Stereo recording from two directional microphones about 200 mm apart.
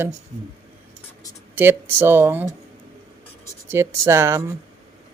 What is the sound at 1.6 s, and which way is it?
Speech, 10° right (ahead or behind).